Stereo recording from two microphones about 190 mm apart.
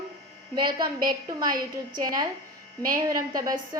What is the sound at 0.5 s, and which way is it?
A woman's voice, 25° right (ahead or behind).